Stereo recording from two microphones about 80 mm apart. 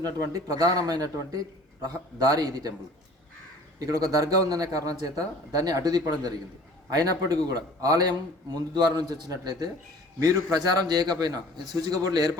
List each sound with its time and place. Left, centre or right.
0.0 s a man's voice: right
3.8 s a man's voice: right